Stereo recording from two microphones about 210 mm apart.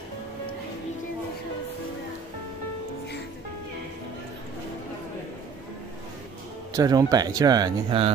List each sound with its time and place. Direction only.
6.7 s speech: 15° right (ahead or behind)